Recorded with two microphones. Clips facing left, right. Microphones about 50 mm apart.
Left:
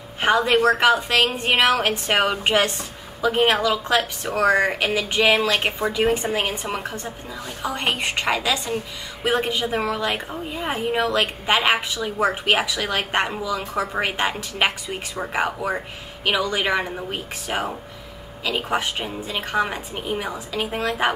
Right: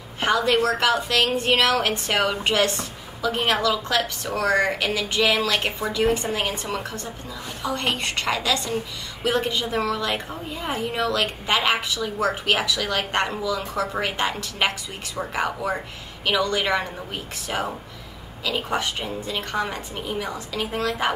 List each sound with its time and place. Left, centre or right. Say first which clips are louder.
0.2 s a woman's voice: left 3 dB; centre